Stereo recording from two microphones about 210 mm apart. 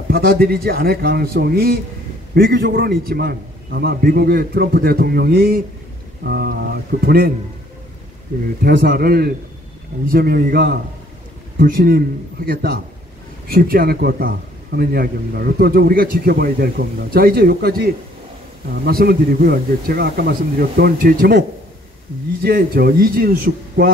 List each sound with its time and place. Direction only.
0.1 s a man's voice: 45° right (ahead or behind)
8.6 s a man's voice: 45° right (ahead or behind)